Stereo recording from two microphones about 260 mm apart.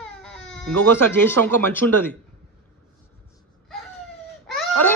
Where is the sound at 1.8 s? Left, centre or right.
Right.